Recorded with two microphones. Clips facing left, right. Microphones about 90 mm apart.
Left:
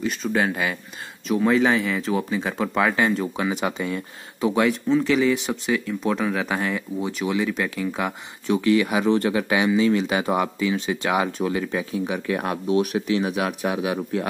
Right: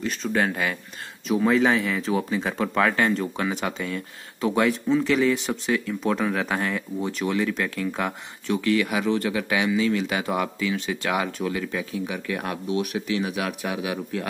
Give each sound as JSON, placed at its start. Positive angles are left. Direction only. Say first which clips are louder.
{"t": 0.0, "sound": "speech", "louder": "left 1 dB", "side_deg": 10}
{"t": 4.5, "sound": "speech", "louder": "left 1 dB", "side_deg": 0}
{"t": 8.5, "sound": "speech", "louder": "left 3 dB", "side_deg": 20}